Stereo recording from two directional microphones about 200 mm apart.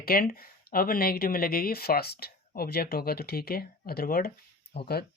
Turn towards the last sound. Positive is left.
turn(degrees=55)  # may be behind; listen again after turning